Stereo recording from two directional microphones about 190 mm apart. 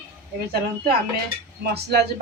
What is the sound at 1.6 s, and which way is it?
Speech, 55° right (ahead or behind).